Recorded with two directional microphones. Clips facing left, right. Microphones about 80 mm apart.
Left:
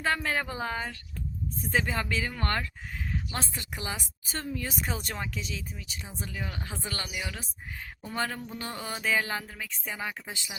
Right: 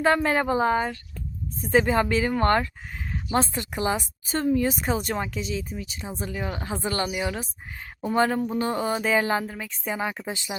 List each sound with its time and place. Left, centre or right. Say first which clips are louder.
0.0 s a woman's voice: right 8 dB; right